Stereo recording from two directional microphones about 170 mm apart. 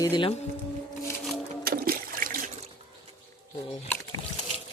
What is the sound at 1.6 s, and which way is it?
Water, 60° right (ahead or behind).